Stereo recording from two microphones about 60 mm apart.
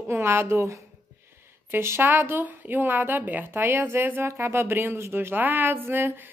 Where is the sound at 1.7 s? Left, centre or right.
Right.